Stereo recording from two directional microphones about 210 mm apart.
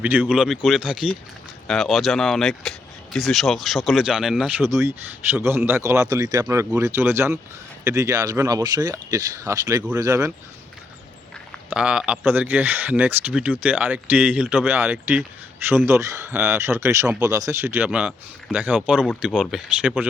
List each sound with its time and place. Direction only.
0.0 s speech: 5° right (ahead or behind)
11.7 s speech: 5° right (ahead or behind)